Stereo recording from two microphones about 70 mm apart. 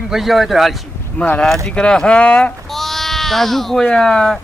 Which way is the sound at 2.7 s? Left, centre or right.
Centre.